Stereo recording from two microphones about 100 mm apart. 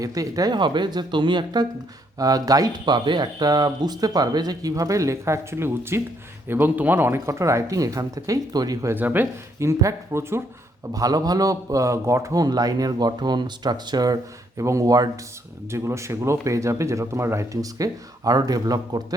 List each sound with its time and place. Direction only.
0.0 s speech: 35° right (ahead or behind)
2.1 s a man's voice: 40° right (ahead or behind)
9.0 s speech: 20° right (ahead or behind)
10.9 s a man's voice: 40° right (ahead or behind)